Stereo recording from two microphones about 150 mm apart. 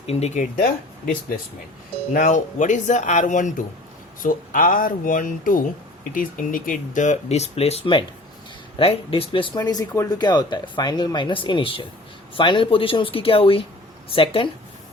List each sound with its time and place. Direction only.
0.0 s speech: 45° left (ahead or behind)
2.1 s speech: 60° left (ahead or behind); by 14.5 s 35° left (ahead or behind)